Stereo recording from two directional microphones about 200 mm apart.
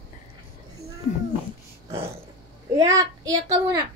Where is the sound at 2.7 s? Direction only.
20° right (ahead or behind).